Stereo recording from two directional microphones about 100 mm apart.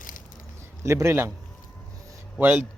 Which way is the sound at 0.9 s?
30° right (ahead or behind).